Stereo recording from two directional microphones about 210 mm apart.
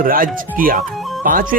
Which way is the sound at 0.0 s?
40° right (ahead or behind).